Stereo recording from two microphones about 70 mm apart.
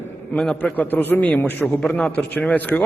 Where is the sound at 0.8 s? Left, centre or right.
Left.